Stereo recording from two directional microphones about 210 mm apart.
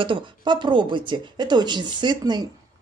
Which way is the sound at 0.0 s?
25° right (ahead or behind).